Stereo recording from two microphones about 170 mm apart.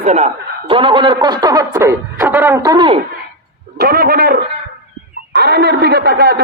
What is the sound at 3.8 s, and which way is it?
Speech, 60° right (ahead or behind).